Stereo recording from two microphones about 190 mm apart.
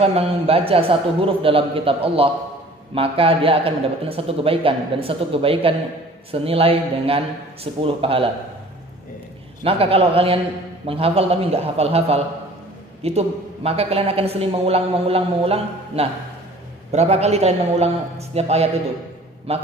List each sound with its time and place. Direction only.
0.0 s a man's voice: 30° right (ahead or behind)
9.6 s a woman's voice: 30° right (ahead or behind)